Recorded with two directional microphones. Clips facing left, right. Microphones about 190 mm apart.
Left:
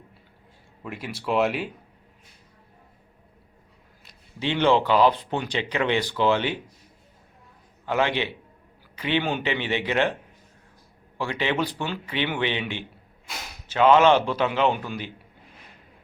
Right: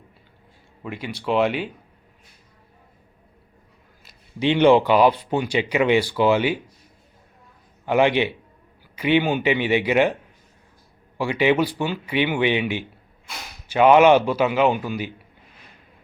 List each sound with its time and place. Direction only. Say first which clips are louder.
0.8 s speech: right 3 dB; centre (ahead or behind)
4.4 s speech: right 6 dB; 15° right (ahead or behind)
7.9 s speech: right 6 dB; 15° right (ahead or behind)
11.2 s speech: right 6 dB; 10° right (ahead or behind)